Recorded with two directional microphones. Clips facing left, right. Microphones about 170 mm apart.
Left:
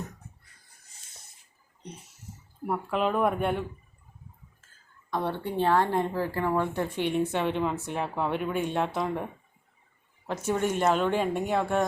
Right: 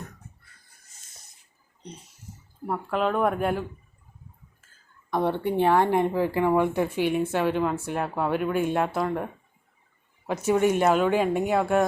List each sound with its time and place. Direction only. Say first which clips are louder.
2.6 s speech: right 1 dB; 5° left (ahead or behind)
5.1 s speech: right 5 dB; 15° right (ahead or behind)